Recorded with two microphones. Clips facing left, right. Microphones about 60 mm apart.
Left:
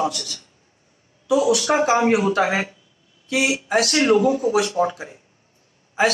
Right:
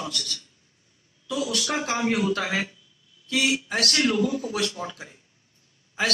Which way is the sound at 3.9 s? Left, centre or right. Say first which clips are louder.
Left 6 dB; left.